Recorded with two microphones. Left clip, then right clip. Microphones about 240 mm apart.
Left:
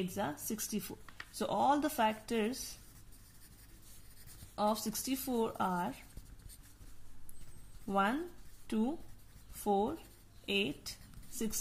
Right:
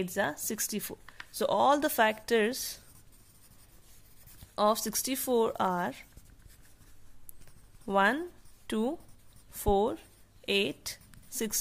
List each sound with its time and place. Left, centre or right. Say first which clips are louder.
0.1 s speech: right 7 dB; right
4.6 s speech: right 7 dB; right
7.8 s speech: right 7 dB; right
10.4 s a sound: right 6 dB; right